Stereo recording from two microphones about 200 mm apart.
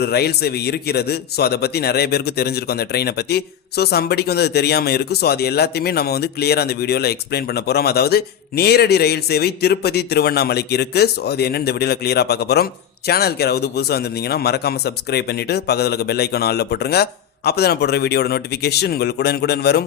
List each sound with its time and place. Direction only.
0.0 s a man's voice: 55° left (ahead or behind)